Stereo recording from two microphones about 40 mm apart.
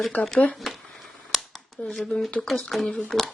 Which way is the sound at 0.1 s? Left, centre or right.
Left.